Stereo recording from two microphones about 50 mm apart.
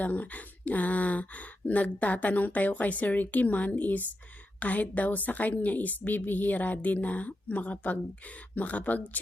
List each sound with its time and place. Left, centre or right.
0.0 s speech: left